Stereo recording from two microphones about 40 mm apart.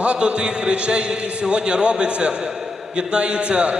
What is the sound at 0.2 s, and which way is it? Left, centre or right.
A man's voice, right.